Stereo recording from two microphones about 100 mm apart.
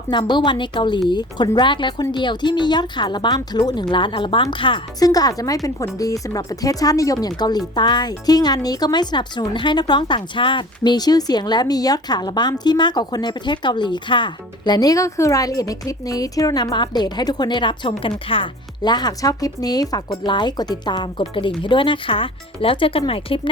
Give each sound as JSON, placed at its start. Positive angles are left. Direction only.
{"t": 0.1, "sound": "speech", "side_deg": 50}
{"t": 4.9, "sound": "speech", "side_deg": 40}
{"t": 16.7, "sound": "speech", "side_deg": 45}
{"t": 20.2, "sound": "speech", "side_deg": 50}